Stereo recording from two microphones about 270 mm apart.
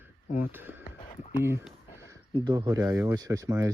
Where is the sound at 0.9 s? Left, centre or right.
Centre.